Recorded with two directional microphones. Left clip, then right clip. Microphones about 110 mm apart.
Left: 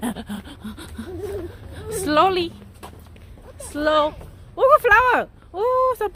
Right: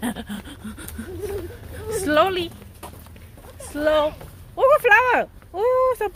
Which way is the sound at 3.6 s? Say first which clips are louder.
Left 1 dB; 30° left (ahead or behind).